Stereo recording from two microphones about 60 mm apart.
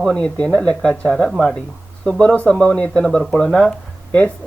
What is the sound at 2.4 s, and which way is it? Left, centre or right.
Speech, centre.